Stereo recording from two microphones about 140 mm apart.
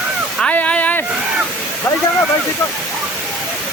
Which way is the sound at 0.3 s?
10° left (ahead or behind).